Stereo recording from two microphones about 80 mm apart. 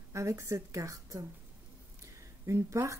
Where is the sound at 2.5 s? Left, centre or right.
Right.